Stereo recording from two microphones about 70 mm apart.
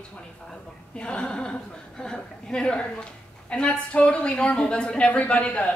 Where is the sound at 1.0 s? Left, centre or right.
Centre.